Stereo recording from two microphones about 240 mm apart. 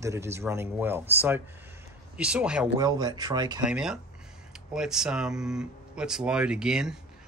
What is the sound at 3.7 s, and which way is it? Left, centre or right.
Speech, centre.